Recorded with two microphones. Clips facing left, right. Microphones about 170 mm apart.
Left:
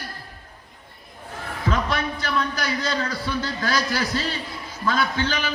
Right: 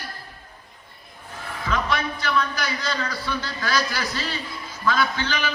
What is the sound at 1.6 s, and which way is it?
A man's voice, 40° left (ahead or behind).